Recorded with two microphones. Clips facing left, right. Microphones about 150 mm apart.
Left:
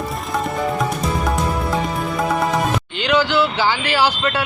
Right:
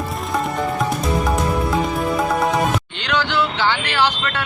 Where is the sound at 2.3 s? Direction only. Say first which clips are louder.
Even; centre (ahead or behind).